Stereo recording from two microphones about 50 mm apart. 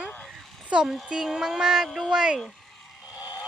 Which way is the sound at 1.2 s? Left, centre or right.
Centre.